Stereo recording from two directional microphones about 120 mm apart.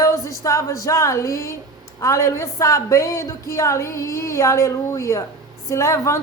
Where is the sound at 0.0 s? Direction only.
25° left (ahead or behind).